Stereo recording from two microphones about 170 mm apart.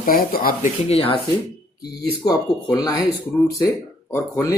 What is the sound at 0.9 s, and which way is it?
Speech, 35° left (ahead or behind).